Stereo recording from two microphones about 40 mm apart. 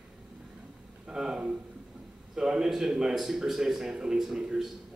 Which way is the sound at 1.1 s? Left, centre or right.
Centre.